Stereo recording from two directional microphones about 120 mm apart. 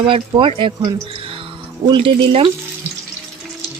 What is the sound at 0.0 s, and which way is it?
Speech, 45° right (ahead or behind).